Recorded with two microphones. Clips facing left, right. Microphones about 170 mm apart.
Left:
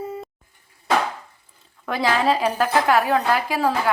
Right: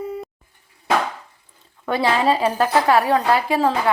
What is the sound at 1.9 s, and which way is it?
A woman's voice, centre (ahead or behind).